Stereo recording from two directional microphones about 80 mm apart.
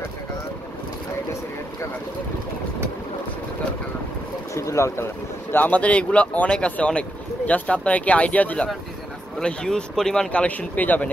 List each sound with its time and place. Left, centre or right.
4.6 s speech: left
5.5 s speech: left